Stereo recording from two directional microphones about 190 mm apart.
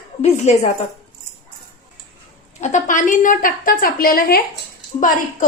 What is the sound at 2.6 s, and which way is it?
A woman's voice, 40° left (ahead or behind).